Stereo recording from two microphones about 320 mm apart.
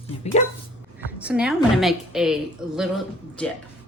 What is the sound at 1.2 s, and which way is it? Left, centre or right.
Speech, centre.